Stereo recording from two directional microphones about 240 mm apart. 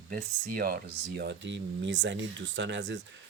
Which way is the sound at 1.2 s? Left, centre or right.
Right.